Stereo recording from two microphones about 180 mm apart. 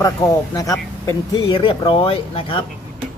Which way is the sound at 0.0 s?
20° left (ahead or behind).